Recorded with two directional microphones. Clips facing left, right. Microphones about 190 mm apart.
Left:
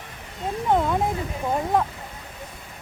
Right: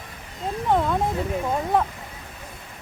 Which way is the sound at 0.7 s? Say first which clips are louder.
Even; 5° left (ahead or behind).